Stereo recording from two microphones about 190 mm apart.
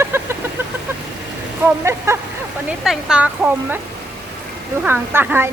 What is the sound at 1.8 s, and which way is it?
Speech, 15° right (ahead or behind).